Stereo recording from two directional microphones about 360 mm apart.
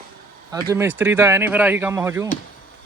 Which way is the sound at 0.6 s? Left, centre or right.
Centre.